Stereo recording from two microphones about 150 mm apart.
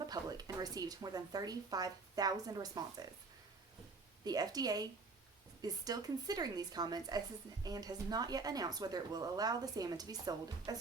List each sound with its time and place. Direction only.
0.1 s a woman's voice: 25° right (ahead or behind)
4.2 s a woman's voice: 25° right (ahead or behind)